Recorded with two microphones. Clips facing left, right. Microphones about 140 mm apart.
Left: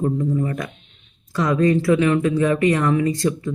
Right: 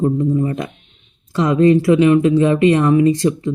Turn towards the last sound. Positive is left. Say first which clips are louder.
# right 6 dB
turn(degrees=-20)  # may be behind; listen again after turning